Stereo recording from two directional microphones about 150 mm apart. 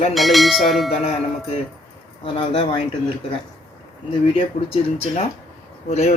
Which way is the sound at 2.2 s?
40° left (ahead or behind).